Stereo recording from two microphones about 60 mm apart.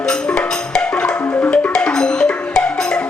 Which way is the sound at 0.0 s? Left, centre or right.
Centre.